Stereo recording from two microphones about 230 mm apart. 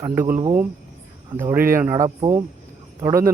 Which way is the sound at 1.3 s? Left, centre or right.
Centre.